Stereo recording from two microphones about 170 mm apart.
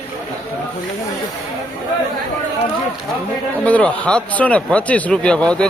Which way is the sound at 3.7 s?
10° left (ahead or behind).